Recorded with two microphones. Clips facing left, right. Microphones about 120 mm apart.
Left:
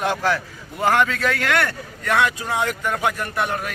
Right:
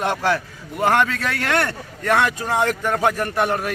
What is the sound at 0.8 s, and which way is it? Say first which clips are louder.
Speech: even; 20° right (ahead or behind).